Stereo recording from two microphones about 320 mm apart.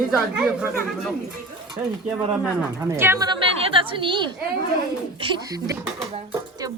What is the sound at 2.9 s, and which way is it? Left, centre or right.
A woman's voice, centre.